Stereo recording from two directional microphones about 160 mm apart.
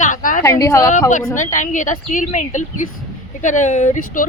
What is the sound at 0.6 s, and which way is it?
Speech, 20° left (ahead or behind).